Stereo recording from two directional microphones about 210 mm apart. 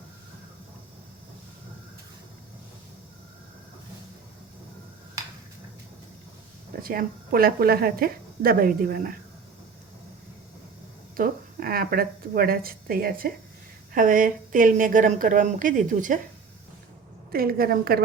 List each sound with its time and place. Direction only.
6.8 s speech: 45° right (ahead or behind)
11.2 s a woman's voice: 45° right (ahead or behind)
17.3 s speech: 45° right (ahead or behind)